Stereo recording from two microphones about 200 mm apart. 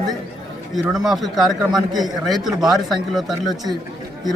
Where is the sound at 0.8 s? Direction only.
Centre (ahead or behind).